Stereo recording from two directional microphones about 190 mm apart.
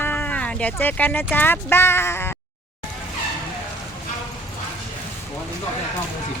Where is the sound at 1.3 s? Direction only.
10° left (ahead or behind).